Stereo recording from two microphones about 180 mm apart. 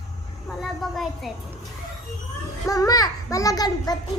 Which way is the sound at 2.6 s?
20° left (ahead or behind).